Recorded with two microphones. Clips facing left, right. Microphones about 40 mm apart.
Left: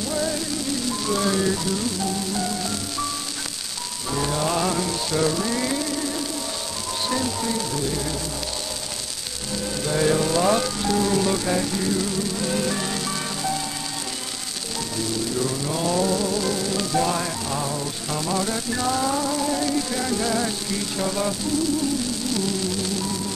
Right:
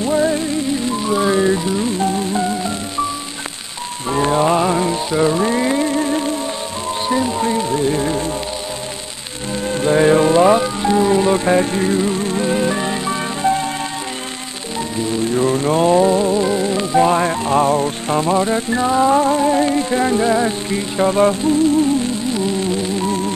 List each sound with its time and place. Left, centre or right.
0.0 s music: right
4.1 s music: right
7.1 s music: right
9.7 s music: right
15.0 s music: right